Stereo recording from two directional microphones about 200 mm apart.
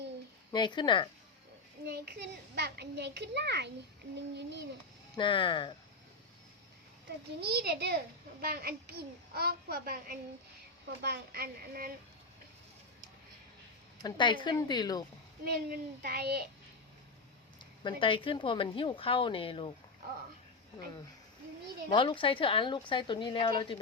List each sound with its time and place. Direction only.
0.5 s a woman's voice: 20° left (ahead or behind)
1.9 s a child's voice: 55° right (ahead or behind)
5.1 s a woman's voice: 25° left (ahead or behind)
7.4 s a child's voice: 55° right (ahead or behind)
14.0 s a woman's voice: 25° left (ahead or behind)
15.4 s a child's voice: 50° right (ahead or behind)
17.6 s a woman's voice: 25° left (ahead or behind)
21.8 s a woman's voice: 25° left (ahead or behind)